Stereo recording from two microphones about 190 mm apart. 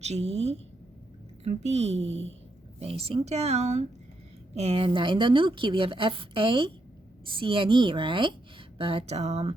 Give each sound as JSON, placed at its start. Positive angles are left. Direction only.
{"t": 0.0, "sound": "a woman's voice", "side_deg": -35}